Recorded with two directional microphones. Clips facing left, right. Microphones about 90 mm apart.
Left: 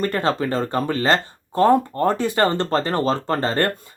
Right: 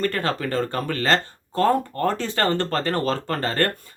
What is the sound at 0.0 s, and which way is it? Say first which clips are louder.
Speech: left 3 dB; 20° left (ahead or behind).